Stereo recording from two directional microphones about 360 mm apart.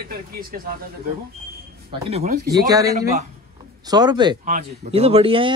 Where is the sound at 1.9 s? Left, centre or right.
Centre.